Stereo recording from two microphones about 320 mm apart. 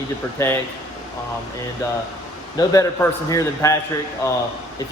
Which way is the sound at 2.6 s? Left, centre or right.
Centre.